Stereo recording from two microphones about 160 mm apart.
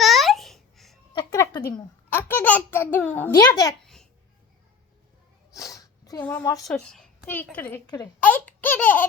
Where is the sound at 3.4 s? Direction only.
25° left (ahead or behind).